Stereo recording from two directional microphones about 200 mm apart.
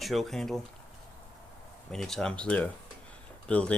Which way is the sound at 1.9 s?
Centre (ahead or behind).